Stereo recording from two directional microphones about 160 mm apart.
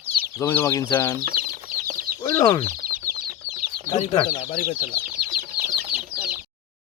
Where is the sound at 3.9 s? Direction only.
35° left (ahead or behind).